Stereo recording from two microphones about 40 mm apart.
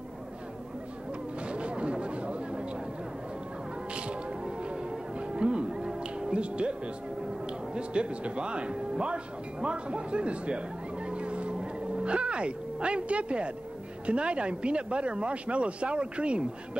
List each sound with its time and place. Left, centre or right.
1.4 s a sound: right
3.9 s music: right
7.4 s speech: right